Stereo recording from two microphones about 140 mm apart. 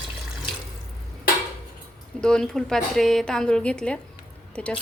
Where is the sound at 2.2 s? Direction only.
5° left (ahead or behind).